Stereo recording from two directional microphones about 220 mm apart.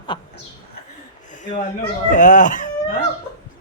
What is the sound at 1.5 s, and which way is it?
Speech, 35° left (ahead or behind).